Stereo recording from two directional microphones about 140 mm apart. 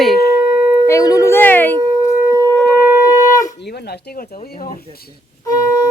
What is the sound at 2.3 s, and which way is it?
Shofar, 25° right (ahead or behind).